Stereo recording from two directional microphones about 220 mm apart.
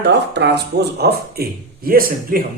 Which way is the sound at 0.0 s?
50° right (ahead or behind).